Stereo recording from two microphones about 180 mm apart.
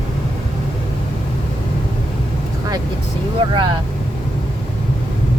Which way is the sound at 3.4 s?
25° right (ahead or behind).